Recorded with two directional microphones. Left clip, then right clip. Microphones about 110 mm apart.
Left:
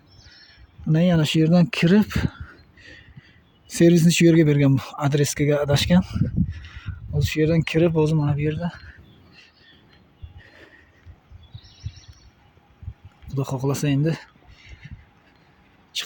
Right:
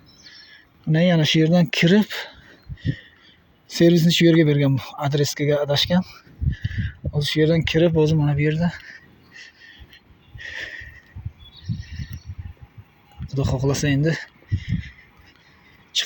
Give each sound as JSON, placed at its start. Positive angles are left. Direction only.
{"t": 0.9, "sound": "speech", "side_deg": 25}
{"t": 1.7, "sound": "a sound", "side_deg": 25}
{"t": 3.7, "sound": "speech", "side_deg": 35}
{"t": 6.0, "sound": "speech", "side_deg": 65}
{"t": 6.5, "sound": "speech", "side_deg": 35}
{"t": 8.2, "sound": "speech", "side_deg": 15}
{"t": 10.4, "sound": "a sound", "side_deg": 5}
{"t": 13.2, "sound": "speech", "side_deg": 20}